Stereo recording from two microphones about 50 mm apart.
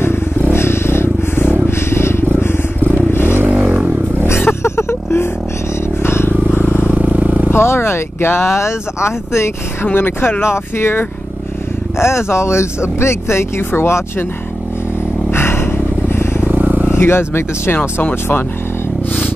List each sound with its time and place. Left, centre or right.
0.5 s vehicle: left
1.9 s vehicle: left
3.3 s vehicle: right
4.3 s vehicle: left
4.6 s music: left
6.0 s vehicle: left
6.5 s vehicle: left
6.9 s vehicle: right
7.5 s speech: left
9.9 s speech: left
12.0 s speech: left
15.3 s vehicle: left
16.3 s vehicle: right
16.9 s speech: left